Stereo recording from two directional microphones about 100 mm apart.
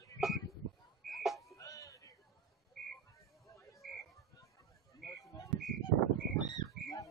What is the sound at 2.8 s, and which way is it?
Frog, 5° left (ahead or behind).